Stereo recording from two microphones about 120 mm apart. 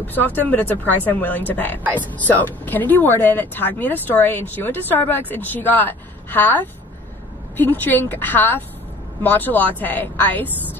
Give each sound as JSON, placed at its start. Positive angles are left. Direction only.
{"t": 0.0, "sound": "speech", "side_deg": 15}